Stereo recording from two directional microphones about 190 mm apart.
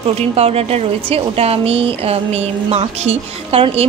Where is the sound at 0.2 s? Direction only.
30° right (ahead or behind).